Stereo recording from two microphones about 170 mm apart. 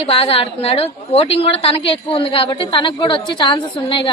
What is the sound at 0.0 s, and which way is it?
A woman's voice, 35° left (ahead or behind).